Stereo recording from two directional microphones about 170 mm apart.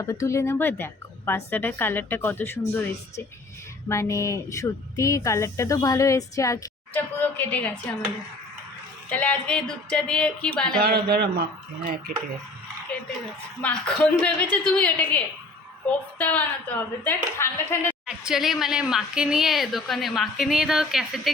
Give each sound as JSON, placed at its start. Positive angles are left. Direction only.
{"t": 0.0, "sound": "speech", "side_deg": 20}
{"t": 9.0, "sound": "speech", "side_deg": 10}
{"t": 10.8, "sound": "a man's voice", "side_deg": -65}
{"t": 13.6, "sound": "speech", "side_deg": 5}
{"t": 18.0, "sound": "speech", "side_deg": -5}